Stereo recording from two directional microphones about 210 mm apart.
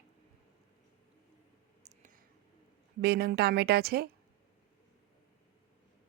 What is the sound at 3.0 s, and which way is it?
Speech, 50° right (ahead or behind).